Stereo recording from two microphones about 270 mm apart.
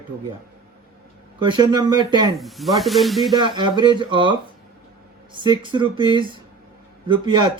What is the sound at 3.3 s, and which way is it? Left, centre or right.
Speech, centre.